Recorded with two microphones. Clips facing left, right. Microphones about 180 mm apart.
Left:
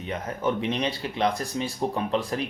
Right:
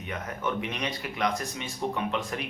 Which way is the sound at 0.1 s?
30° left (ahead or behind).